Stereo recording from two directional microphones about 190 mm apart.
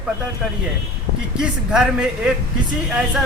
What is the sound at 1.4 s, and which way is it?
Speech, 5° right (ahead or behind).